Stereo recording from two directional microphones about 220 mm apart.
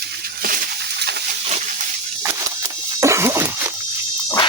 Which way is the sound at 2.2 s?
15° right (ahead or behind).